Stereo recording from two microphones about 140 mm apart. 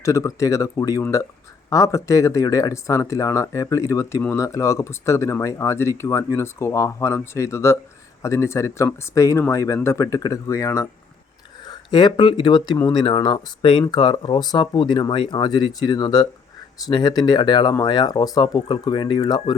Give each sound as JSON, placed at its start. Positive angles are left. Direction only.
{"t": 0.0, "sound": "speech", "side_deg": 25}
{"t": 11.7, "sound": "speech", "side_deg": 30}